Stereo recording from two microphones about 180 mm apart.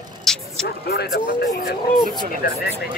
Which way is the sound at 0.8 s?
60° left (ahead or behind).